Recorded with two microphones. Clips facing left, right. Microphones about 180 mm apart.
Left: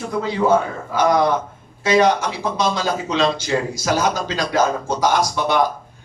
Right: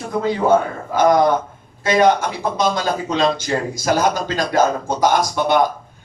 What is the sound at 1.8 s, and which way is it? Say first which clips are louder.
A man's voice: right 1 dB; 50° right (ahead or behind).